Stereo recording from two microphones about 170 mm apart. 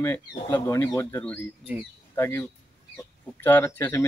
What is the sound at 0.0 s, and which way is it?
Speech, 20° left (ahead or behind).